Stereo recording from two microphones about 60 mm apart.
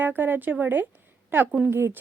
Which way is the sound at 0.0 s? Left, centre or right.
Right.